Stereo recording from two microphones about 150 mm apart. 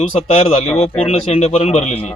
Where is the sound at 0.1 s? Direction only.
45° left (ahead or behind).